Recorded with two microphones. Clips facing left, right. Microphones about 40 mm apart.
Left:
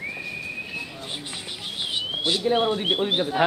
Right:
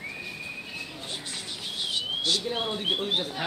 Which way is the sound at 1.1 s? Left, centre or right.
Left.